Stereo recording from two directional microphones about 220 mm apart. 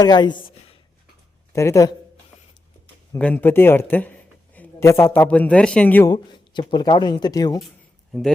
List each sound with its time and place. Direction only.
0.0 s speech: 20° left (ahead or behind)
1.5 s speech: 15° left (ahead or behind)
3.1 s speech: 5° left (ahead or behind)
6.5 s speech: 20° left (ahead or behind)